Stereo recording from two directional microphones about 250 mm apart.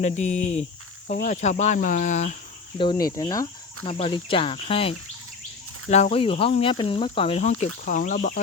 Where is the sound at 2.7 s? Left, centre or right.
Centre.